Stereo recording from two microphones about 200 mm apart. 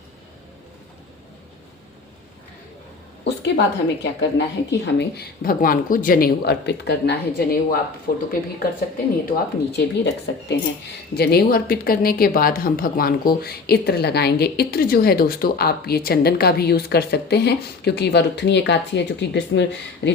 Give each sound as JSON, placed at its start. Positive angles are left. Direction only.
{"t": 3.2, "sound": "speech", "side_deg": 60}
{"t": 9.3, "sound": "speech", "side_deg": 55}
{"t": 11.1, "sound": "speech", "side_deg": 50}